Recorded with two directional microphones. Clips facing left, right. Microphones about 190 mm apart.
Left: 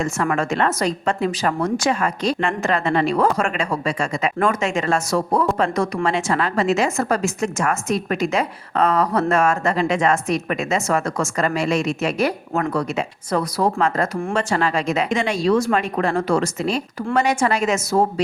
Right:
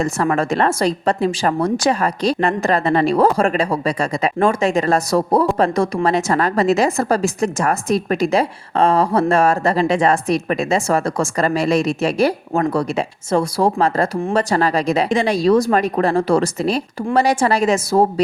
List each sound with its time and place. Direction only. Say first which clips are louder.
0.0 s a woman's voice: right 3 dB; 35° right (ahead or behind)